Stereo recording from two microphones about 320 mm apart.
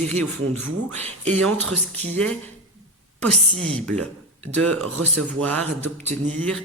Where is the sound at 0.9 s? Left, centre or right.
Centre.